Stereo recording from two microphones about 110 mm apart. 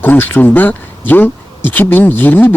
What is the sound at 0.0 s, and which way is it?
Speech, 20° left (ahead or behind).